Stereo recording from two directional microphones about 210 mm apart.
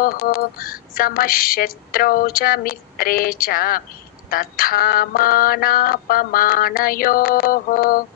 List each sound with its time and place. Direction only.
0.0 s speech: 45° left (ahead or behind)